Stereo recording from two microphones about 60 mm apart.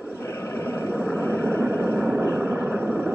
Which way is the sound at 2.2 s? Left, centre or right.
Right.